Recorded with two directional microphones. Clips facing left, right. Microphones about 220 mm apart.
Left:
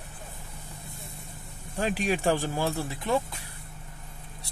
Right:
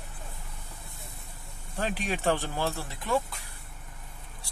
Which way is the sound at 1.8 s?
10° left (ahead or behind).